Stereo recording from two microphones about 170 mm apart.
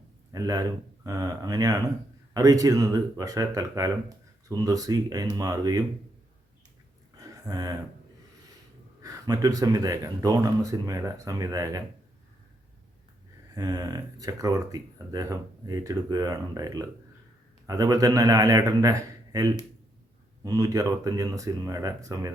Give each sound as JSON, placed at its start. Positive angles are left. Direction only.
{"t": 0.3, "sound": "speech", "side_deg": -20}
{"t": 7.2, "sound": "a sound", "side_deg": -20}
{"t": 9.0, "sound": "speech", "side_deg": -20}
{"t": 13.5, "sound": "speech", "side_deg": -20}